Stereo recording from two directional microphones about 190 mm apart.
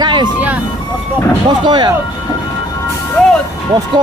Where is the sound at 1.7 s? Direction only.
20° right (ahead or behind).